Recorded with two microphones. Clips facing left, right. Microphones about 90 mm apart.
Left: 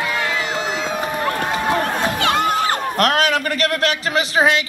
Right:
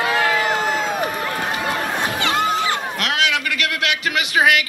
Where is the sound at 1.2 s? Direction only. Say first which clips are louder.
Left 3 dB; 40° left (ahead or behind).